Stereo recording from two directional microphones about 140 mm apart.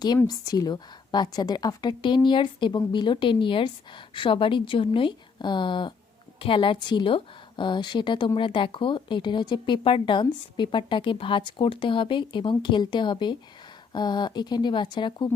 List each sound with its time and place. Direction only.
0.3 s a woman's voice: 30° left (ahead or behind)